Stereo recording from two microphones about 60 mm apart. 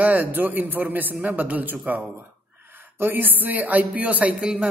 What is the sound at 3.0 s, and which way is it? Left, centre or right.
A man's voice, right.